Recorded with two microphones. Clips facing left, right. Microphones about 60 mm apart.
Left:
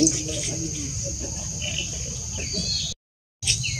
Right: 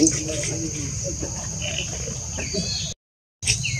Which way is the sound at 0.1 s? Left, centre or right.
Right.